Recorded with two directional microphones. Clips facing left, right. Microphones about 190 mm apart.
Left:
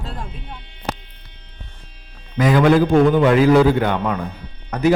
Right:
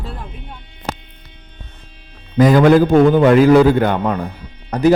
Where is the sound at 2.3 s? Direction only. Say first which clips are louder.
Right 4 dB; 40° right (ahead or behind).